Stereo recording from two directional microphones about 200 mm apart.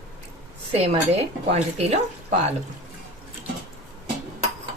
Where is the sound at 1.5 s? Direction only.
30° right (ahead or behind).